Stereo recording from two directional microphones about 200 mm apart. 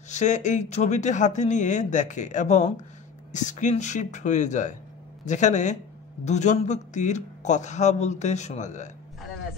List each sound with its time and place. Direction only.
0.1 s a man's voice: 35° left (ahead or behind)